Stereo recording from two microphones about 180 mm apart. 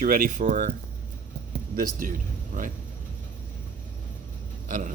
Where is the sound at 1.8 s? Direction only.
50° right (ahead or behind).